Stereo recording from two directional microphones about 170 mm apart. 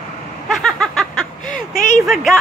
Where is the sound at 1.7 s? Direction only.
45° left (ahead or behind).